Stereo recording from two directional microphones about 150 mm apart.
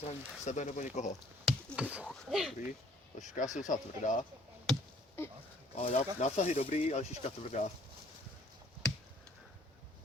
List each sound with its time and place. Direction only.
0.1 s speech: 50° left (ahead or behind)
1.5 s speech: 10° right (ahead or behind)
3.2 s speech: 55° left (ahead or behind)
4.7 s chop: 5° left (ahead or behind)
5.7 s speech: 40° left (ahead or behind)